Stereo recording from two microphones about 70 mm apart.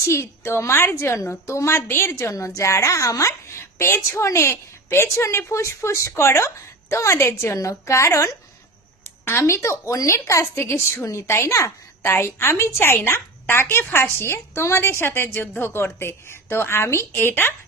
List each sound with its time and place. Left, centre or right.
0.0 s a woman's voice: left
9.2 s a woman's voice: left